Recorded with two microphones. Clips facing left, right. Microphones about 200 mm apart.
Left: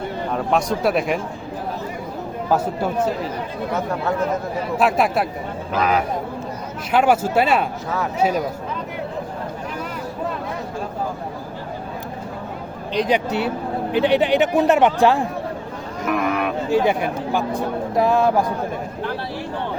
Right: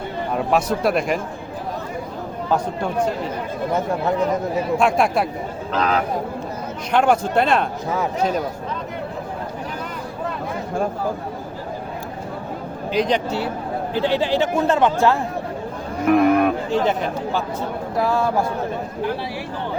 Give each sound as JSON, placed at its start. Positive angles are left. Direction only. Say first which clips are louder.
{"t": 0.3, "sound": "speech", "louder": "right 1 dB", "side_deg": -5}
{"t": 2.5, "sound": "speech", "louder": "left 2 dB", "side_deg": 5}
{"t": 4.8, "sound": "speech", "louder": "left 2 dB", "side_deg": 5}
{"t": 13.0, "sound": "speech", "louder": "right 1 dB", "side_deg": 0}
{"t": 13.9, "sound": "speech", "louder": "left 3 dB", "side_deg": 20}
{"t": 16.0, "sound": "speech", "louder": "right 7 dB", "side_deg": -55}
{"t": 16.7, "sound": "speech", "louder": "left 2 dB", "side_deg": 10}